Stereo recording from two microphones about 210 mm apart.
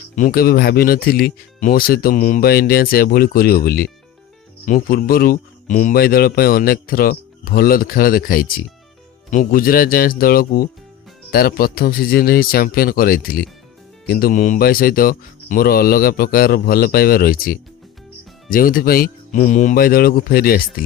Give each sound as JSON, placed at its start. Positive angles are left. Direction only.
{"t": 0.2, "sound": "speech", "side_deg": 45}